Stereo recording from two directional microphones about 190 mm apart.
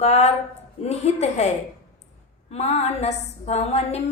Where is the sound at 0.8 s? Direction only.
35° left (ahead or behind).